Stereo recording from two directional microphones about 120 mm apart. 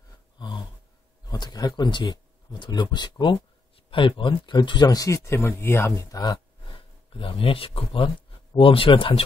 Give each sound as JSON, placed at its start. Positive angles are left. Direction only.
{"t": 1.2, "sound": "speech", "side_deg": 35}
{"t": 7.1, "sound": "speech", "side_deg": 45}